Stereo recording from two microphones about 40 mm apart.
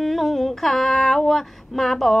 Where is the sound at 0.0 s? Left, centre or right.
Centre.